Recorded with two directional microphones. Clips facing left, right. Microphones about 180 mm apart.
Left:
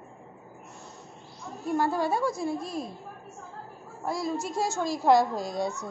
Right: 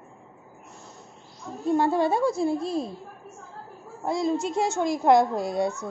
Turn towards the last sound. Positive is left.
turn(degrees=0)  # may be behind; listen again after turning